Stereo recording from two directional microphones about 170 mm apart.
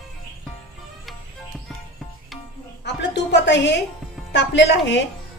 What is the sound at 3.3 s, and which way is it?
Speech, 90° left.